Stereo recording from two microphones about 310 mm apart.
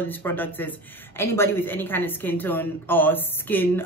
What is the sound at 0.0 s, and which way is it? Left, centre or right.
Speech, centre.